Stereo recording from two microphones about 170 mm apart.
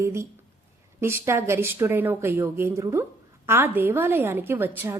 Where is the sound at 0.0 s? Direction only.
15° right (ahead or behind).